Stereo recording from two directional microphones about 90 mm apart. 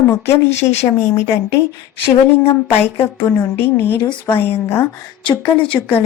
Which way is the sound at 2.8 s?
25° left (ahead or behind).